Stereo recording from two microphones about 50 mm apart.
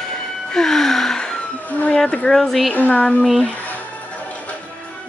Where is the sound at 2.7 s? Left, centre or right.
Left.